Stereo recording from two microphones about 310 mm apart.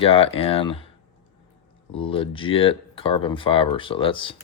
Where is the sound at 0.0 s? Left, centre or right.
Centre.